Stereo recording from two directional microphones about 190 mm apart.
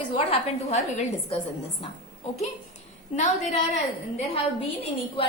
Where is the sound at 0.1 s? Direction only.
35° left (ahead or behind).